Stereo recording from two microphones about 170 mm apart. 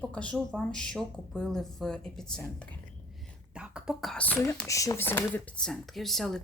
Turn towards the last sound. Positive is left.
turn(degrees=0)  # may be behind; listen again after turning